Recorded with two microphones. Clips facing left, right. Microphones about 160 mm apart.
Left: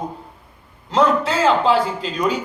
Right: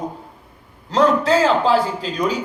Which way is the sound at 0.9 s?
35° right (ahead or behind).